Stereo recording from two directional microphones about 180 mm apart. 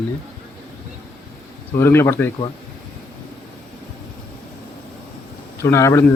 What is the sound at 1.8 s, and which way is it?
Speech, 15° left (ahead or behind).